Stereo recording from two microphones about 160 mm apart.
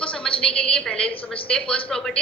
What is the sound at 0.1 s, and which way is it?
Speech, 5° left (ahead or behind).